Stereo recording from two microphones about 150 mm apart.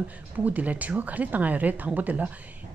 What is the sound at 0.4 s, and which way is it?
A woman's voice, 10° right (ahead or behind).